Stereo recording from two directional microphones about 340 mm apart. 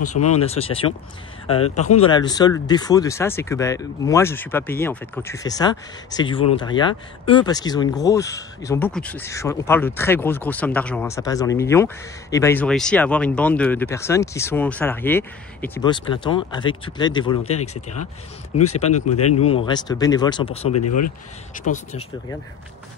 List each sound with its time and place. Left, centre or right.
0.4 s speech: centre
2.0 s speech: centre
18.6 s speech: centre
19.1 s speech: left
19.6 s speech: centre
20.7 s speech: left
21.6 s speech: left